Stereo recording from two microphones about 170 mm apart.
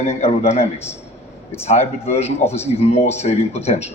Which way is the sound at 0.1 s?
40° left (ahead or behind).